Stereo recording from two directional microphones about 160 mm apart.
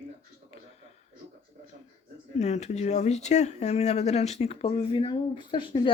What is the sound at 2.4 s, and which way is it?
Speech, 45° left (ahead or behind).